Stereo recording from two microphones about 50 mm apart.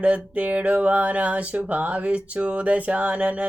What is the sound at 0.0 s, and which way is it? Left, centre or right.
A woman's voice, right.